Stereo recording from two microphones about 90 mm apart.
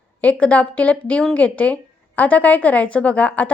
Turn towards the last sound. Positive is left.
turn(degrees=15)  # may be behind; listen again after turning